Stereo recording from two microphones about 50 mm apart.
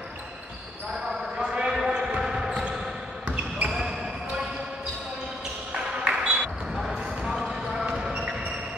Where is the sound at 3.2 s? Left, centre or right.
Right.